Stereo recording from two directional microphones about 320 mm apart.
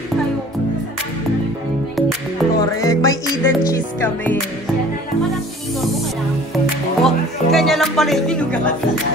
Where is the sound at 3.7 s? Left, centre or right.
Centre.